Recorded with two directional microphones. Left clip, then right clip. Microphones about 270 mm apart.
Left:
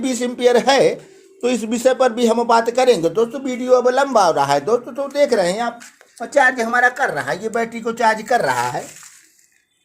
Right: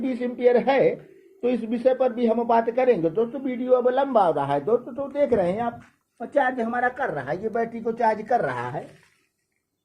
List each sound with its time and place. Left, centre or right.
0.0 s speech: left